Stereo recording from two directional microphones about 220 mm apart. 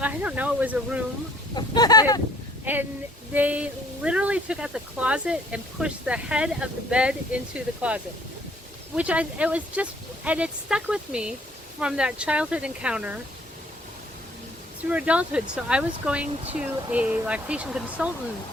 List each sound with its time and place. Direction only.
0.0 s speech: 5° right (ahead or behind)
1.5 s speech: 20° left (ahead or behind)
2.7 s speech: 10° right (ahead or behind)
14.8 s speech: 5° right (ahead or behind)